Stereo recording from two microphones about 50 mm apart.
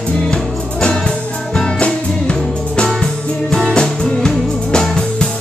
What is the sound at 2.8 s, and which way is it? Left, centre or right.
Music, centre.